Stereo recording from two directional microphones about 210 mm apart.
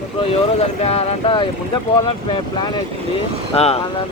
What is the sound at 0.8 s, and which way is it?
Speech, 30° left (ahead or behind).